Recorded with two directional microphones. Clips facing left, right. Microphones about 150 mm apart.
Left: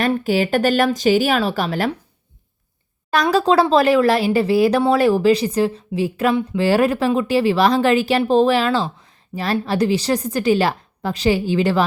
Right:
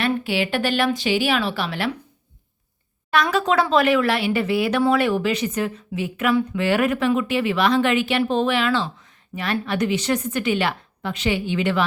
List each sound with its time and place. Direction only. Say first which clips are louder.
0.0 s speech: left 4 dB; 40° left (ahead or behind)
3.1 s a woman's voice: left 4 dB; 35° left (ahead or behind)